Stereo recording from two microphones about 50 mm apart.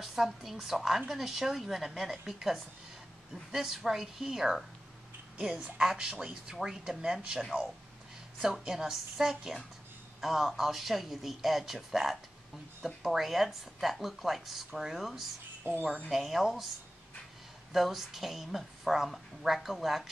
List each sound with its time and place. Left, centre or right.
0.0 s a woman's voice: centre
3.5 s a woman's voice: centre
5.8 s a woman's voice: centre
8.6 s a woman's voice: centre
15.7 s speech: right
16.1 s a woman's voice: centre
17.7 s a woman's voice: centre